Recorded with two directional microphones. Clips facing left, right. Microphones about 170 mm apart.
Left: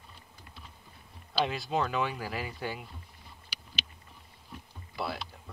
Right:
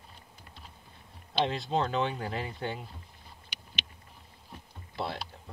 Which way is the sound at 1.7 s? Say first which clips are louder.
Right 1 dB; 30° right (ahead or behind).